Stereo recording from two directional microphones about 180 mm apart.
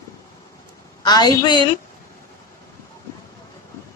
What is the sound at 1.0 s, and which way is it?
Speech, 20° left (ahead or behind).